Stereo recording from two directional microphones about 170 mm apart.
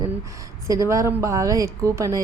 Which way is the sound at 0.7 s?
20° right (ahead or behind).